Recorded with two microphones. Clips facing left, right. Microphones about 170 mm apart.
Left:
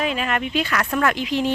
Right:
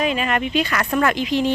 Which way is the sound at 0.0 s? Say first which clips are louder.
Right 2 dB; centre (ahead or behind).